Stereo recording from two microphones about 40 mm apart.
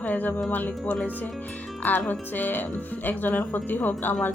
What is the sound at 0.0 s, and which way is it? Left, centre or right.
Speech, left.